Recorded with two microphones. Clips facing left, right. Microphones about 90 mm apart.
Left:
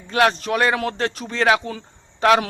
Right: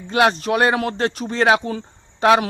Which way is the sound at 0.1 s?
20° right (ahead or behind).